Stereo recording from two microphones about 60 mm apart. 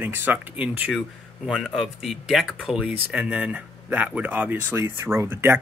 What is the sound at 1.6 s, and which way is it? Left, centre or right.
Speech, centre.